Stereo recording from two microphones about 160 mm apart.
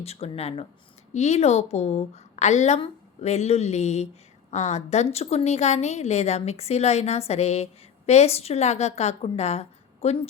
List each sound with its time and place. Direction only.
0.0 s a woman's voice: 40° left (ahead or behind)